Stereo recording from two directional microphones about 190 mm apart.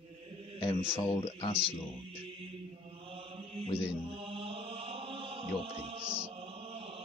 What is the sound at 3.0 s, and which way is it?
Mantra, 30° right (ahead or behind).